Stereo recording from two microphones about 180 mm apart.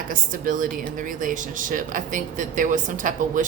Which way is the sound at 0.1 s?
50° right (ahead or behind).